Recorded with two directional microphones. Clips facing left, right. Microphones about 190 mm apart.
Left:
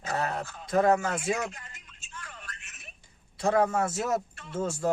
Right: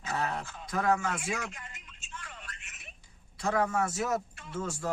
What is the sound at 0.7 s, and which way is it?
Speech, 25° left (ahead or behind).